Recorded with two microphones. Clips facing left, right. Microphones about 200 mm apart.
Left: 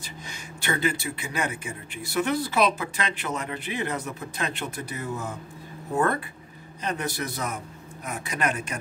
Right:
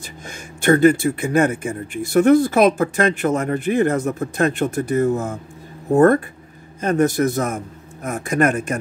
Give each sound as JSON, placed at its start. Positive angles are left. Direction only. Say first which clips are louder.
{"t": 0.3, "sound": "speech", "louder": "right 14 dB", "side_deg": -50}